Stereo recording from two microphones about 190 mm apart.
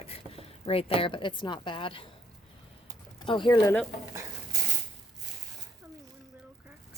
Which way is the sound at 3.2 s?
25° left (ahead or behind).